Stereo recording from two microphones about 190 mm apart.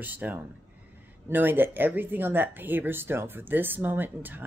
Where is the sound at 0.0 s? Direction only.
10° right (ahead or behind).